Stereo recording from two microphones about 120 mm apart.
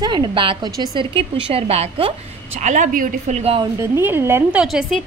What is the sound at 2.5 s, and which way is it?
A woman's voice, 90° right.